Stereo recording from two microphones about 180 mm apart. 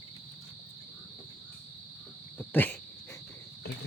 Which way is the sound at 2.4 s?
10° left (ahead or behind).